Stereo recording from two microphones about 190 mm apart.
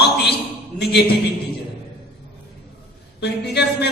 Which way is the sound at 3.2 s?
60° left (ahead or behind).